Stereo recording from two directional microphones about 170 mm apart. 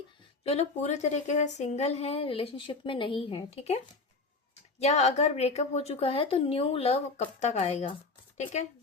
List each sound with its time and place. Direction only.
0.4 s speech: 40° left (ahead or behind)
4.8 s speech: 40° left (ahead or behind)